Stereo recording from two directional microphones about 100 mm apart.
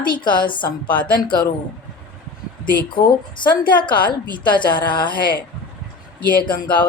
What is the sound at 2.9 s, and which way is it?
A woman's voice, 50° left (ahead or behind).